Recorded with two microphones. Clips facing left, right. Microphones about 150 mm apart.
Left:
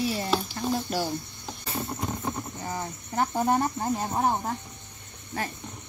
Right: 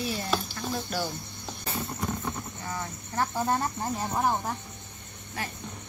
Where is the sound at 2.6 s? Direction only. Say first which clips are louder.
Left 1 dB; 25° left (ahead or behind).